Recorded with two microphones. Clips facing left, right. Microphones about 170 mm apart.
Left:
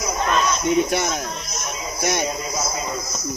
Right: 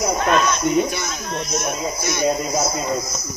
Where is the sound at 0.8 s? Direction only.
65° left (ahead or behind).